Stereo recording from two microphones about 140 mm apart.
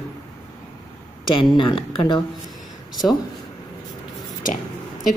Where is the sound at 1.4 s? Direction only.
35° left (ahead or behind).